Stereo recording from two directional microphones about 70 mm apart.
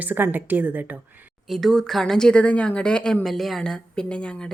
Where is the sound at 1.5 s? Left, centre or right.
Centre.